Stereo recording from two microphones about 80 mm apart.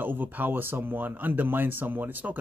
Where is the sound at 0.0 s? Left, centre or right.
Right.